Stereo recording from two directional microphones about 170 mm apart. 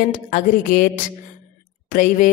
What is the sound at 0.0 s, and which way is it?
A woman's voice, 50° left (ahead or behind).